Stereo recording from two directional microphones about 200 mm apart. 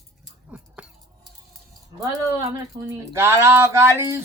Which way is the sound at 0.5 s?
5° right (ahead or behind).